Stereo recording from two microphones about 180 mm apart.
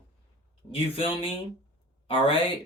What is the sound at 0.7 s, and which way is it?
Speech, 30° left (ahead or behind).